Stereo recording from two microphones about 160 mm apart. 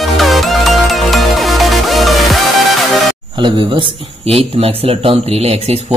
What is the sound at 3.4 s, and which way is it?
A man's voice, 30° right (ahead or behind).